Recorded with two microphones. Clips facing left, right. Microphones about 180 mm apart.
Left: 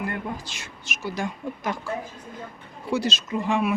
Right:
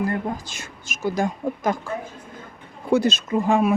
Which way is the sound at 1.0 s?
45° right (ahead or behind).